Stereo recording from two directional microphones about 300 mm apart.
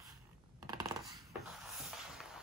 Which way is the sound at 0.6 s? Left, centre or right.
Centre.